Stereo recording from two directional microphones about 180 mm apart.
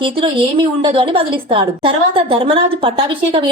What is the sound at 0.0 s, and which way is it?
A woman's voice, 30° right (ahead or behind).